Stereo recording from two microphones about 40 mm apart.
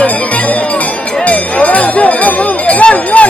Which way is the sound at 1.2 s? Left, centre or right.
Left.